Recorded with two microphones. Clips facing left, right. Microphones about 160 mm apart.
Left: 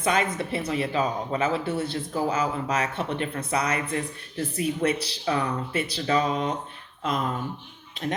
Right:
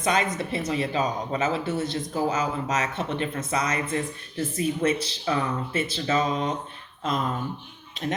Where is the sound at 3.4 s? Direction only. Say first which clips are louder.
Even; 35° left (ahead or behind).